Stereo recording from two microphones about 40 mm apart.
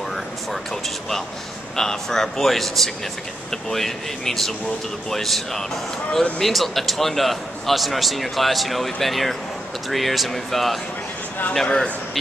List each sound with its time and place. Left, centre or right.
1.8 s a man's voice: centre
11.6 s a man's voice: centre